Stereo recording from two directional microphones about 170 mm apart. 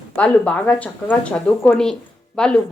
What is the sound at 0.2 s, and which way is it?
A woman's voice, 5° left (ahead or behind).